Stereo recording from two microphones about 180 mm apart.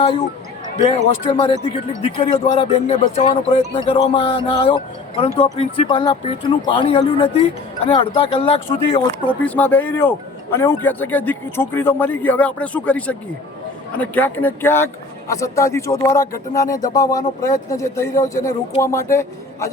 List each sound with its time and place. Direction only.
0.9 s speech: 30° left (ahead or behind)
9.5 s speech: 10° left (ahead or behind)